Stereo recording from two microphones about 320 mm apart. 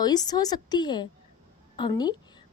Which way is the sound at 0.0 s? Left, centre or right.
Centre.